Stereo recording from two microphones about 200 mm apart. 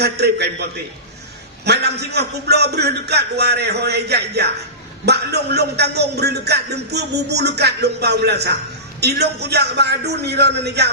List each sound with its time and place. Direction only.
0.0 s a man's voice: 55° right (ahead or behind)